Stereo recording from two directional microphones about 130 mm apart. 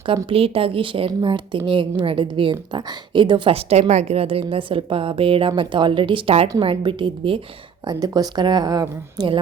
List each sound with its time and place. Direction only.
0.3 s a woman's voice: 45° right (ahead or behind)
7.9 s speech: 30° right (ahead or behind)